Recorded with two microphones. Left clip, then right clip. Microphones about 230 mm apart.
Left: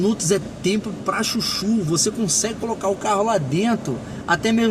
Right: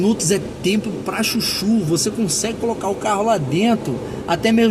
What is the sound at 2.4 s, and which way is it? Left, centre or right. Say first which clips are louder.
Speech: right 2 dB; centre.